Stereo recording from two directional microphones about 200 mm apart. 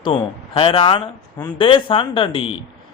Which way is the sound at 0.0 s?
30° left (ahead or behind).